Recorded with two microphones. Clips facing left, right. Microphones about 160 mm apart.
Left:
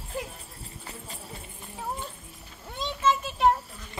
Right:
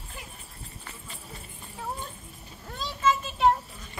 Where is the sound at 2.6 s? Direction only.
20° left (ahead or behind).